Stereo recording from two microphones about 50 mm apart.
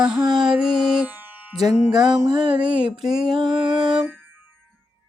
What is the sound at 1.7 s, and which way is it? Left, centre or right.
Music, right.